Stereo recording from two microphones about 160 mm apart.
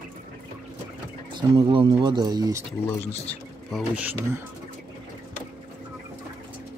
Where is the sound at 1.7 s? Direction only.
35° right (ahead or behind).